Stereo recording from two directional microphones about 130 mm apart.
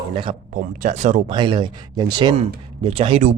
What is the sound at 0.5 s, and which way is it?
Speech, 85° right.